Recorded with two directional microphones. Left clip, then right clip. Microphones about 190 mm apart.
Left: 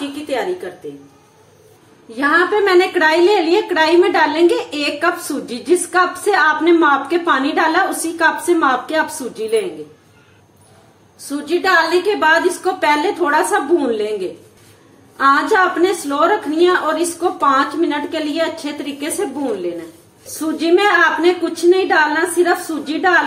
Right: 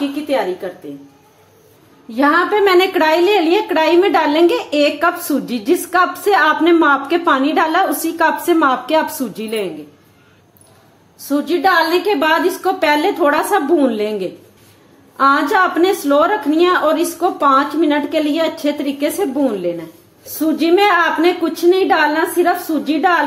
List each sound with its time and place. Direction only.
2.1 s a woman's voice: 50° right (ahead or behind)
11.2 s a woman's voice: 45° right (ahead or behind)
15.1 s a woman's voice: 50° right (ahead or behind)